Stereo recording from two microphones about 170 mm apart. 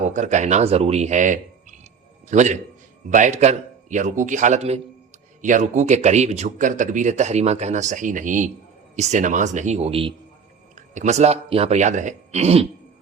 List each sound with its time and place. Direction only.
0.0 s a man's voice: 45° right (ahead or behind)
10.8 s speech: 45° right (ahead or behind)